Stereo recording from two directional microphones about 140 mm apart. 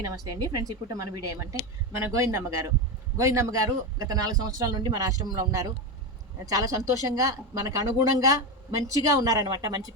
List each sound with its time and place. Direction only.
0.0 s speech: 25° right (ahead or behind)